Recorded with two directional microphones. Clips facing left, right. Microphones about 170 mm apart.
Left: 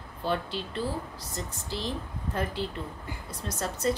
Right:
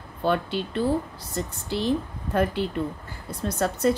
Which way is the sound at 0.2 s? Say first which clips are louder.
Right 6 dB; 60° right (ahead or behind).